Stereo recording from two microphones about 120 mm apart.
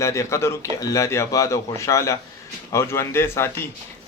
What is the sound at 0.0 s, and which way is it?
Speech, 25° left (ahead or behind).